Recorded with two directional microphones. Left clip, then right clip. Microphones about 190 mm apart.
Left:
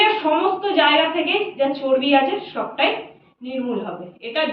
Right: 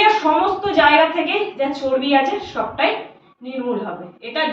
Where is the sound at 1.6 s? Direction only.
20° right (ahead or behind).